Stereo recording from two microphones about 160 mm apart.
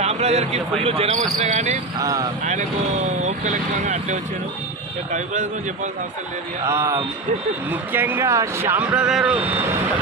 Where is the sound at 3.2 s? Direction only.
45° right (ahead or behind).